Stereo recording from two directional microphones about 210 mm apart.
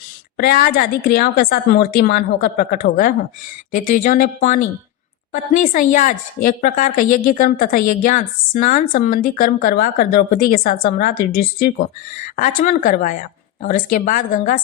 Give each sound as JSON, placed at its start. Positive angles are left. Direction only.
{"t": 0.3, "sound": "a woman's voice", "side_deg": 45}